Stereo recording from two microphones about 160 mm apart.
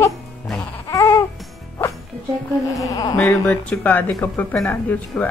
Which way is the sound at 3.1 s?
10° left (ahead or behind).